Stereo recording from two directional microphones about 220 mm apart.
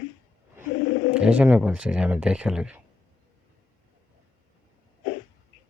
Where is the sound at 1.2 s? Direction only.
5° right (ahead or behind).